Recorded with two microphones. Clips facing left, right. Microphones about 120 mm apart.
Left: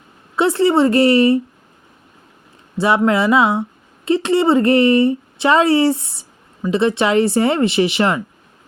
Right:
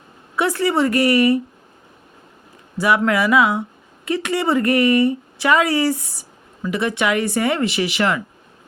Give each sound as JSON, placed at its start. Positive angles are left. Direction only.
{"t": 0.3, "sound": "a woman's voice", "side_deg": 25}
{"t": 2.7, "sound": "a woman's voice", "side_deg": 25}